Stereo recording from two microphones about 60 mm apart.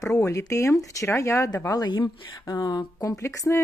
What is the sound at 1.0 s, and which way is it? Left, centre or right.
Speech, left.